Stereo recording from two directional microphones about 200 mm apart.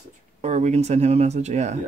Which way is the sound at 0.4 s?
35° right (ahead or behind).